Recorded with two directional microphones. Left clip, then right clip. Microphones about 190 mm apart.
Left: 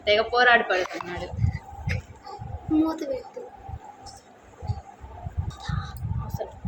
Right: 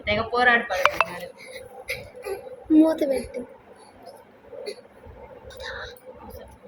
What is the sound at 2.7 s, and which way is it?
Speech, 15° right (ahead or behind).